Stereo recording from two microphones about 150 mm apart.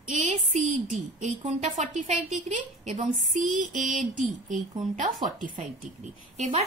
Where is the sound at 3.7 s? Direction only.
55° right (ahead or behind).